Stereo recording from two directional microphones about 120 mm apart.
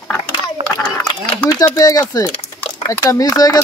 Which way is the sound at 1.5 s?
30° left (ahead or behind).